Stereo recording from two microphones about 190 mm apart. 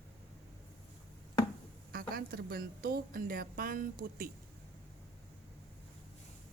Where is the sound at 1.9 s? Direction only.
50° right (ahead or behind).